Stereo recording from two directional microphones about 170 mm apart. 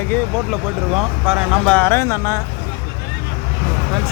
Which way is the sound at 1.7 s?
15° left (ahead or behind).